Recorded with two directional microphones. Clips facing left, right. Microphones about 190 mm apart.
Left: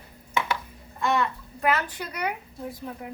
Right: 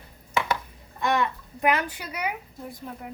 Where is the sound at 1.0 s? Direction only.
15° right (ahead or behind).